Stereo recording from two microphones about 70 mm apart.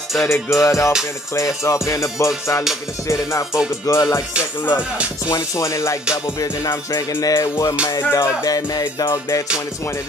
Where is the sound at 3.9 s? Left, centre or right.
Left.